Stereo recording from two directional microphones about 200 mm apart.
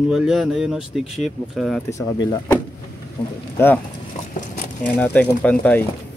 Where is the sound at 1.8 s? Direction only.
15° left (ahead or behind).